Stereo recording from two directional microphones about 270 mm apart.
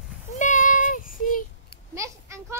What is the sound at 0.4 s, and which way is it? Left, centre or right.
Child singing, left.